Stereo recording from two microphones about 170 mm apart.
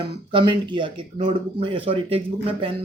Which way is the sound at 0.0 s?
30° right (ahead or behind).